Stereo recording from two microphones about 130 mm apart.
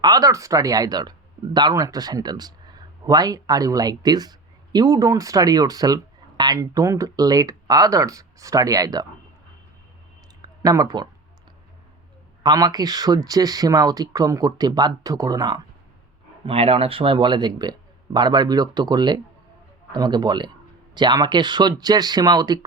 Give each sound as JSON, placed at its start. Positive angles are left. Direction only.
{"t": 0.0, "sound": "speech", "side_deg": -30}
{"t": 10.4, "sound": "speech", "side_deg": -30}
{"t": 12.4, "sound": "speech", "side_deg": -35}
{"t": 16.5, "sound": "speech", "side_deg": -50}